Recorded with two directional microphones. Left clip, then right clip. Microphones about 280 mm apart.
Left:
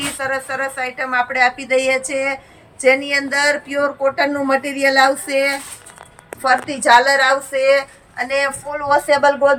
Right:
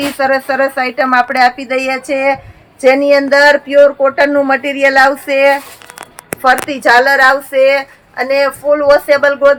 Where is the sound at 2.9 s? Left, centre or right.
Centre.